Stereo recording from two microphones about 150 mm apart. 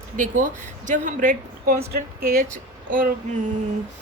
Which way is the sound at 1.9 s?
85° right.